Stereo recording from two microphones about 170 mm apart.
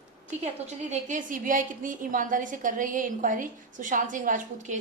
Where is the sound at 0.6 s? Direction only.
45° right (ahead or behind).